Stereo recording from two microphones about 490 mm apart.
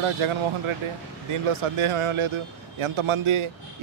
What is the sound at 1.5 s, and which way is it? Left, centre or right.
A man's voice, right.